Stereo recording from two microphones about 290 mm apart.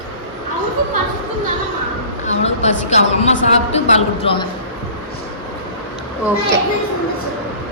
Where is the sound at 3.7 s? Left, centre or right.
Centre.